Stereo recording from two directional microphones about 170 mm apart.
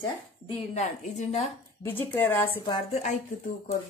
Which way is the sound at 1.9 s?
10° left (ahead or behind).